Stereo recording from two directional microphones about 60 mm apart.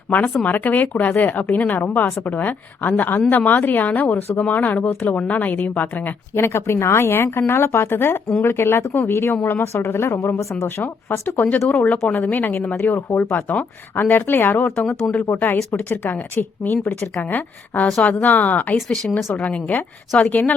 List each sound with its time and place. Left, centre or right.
0.4 s speech: left
6.3 s speech: left
18.8 s speech: centre
19.1 s speech: left